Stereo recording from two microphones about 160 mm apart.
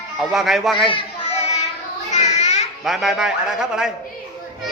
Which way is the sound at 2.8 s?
Centre (ahead or behind).